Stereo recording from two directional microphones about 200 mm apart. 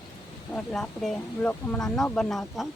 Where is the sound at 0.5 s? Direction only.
5° left (ahead or behind).